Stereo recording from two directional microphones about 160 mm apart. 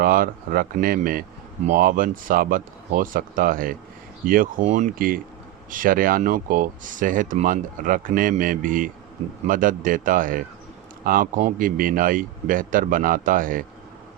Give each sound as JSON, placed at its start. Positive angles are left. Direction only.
{"t": 0.0, "sound": "speech", "side_deg": -65}